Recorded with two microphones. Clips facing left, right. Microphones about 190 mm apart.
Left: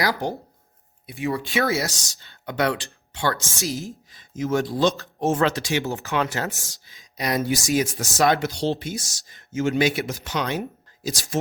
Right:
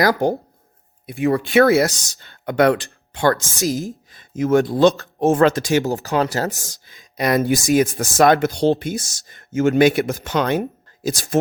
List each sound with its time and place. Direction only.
0.0 s speech: 50° right (ahead or behind)
5.7 s speech: 40° right (ahead or behind)
6.5 s speech: 20° right (ahead or behind)
6.8 s speech: 55° right (ahead or behind)